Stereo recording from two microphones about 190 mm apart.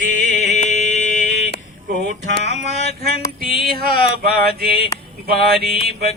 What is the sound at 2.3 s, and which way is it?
Music, 35° left (ahead or behind).